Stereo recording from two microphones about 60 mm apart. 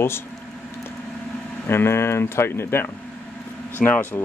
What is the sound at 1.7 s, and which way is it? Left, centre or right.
Speech, left.